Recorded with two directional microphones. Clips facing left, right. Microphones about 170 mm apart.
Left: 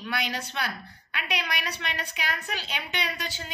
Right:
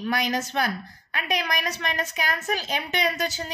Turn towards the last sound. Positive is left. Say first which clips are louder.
# right 7 dB
turn(degrees=-40)  # may be behind; listen again after turning